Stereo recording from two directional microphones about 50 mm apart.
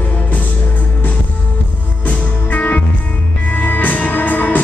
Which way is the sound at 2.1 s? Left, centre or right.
Left.